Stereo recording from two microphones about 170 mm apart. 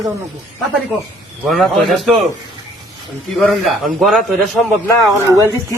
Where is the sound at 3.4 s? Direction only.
Centre (ahead or behind).